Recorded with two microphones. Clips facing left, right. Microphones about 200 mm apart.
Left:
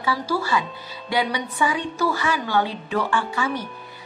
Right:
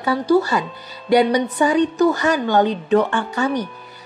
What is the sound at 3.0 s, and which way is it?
Speech, 40° right (ahead or behind).